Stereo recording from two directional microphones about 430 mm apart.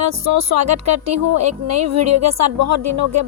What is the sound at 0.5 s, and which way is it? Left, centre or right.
Speech, right.